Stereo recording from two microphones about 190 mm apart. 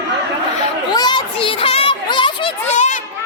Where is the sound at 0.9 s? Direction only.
25° left (ahead or behind); by 3.0 s 40° left (ahead or behind).